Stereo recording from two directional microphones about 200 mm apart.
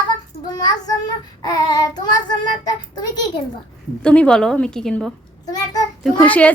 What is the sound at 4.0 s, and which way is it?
A woman's voice, 5° left (ahead or behind).